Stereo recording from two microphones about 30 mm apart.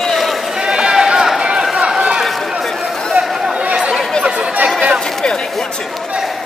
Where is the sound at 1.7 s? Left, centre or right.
Right.